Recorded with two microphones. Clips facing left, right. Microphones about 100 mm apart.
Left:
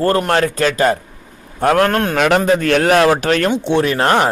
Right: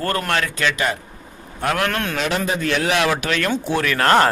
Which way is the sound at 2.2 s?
55° left (ahead or behind).